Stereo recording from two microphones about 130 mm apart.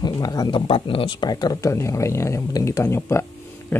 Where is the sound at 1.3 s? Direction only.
30° left (ahead or behind).